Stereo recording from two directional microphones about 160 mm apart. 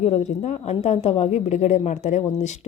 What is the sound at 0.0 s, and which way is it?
A woman's voice, 45° left (ahead or behind).